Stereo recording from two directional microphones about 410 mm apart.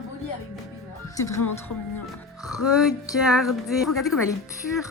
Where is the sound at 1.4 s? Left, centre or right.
Left.